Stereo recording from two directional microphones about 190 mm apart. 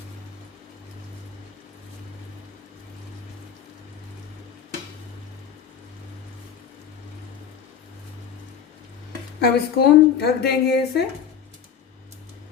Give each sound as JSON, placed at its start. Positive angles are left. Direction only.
{"t": 9.4, "sound": "a woman's voice", "side_deg": 55}